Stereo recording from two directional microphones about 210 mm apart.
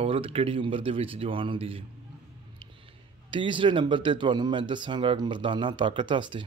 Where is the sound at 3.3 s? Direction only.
25° right (ahead or behind).